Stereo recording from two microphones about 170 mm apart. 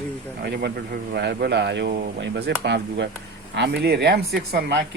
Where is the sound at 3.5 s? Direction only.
75° right (ahead or behind).